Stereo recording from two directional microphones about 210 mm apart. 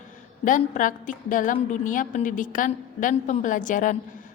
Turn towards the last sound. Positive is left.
turn(degrees=35)  # may be behind; listen again after turning